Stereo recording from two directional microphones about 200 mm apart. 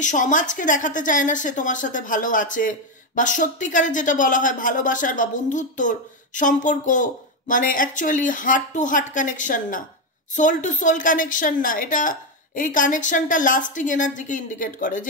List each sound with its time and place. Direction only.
0.0 s a woman's voice: 40° left (ahead or behind)